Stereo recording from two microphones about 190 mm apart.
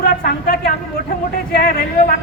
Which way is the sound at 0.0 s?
55° left (ahead or behind).